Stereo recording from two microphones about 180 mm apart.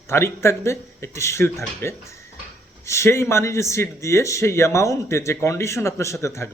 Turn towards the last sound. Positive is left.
turn(degrees=15)  # may be behind; listen again after turning